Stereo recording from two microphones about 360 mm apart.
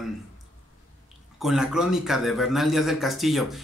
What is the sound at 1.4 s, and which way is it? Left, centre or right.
A man's voice, centre.